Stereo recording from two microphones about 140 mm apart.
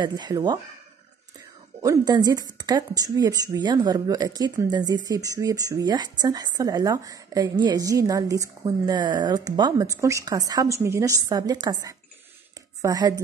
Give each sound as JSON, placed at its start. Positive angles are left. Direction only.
{"t": 0.0, "sound": "speech", "side_deg": -30}
{"t": 1.8, "sound": "speech", "side_deg": -25}